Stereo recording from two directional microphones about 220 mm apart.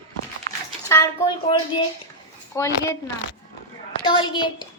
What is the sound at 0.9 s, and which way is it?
A woman's voice, 15° left (ahead or behind).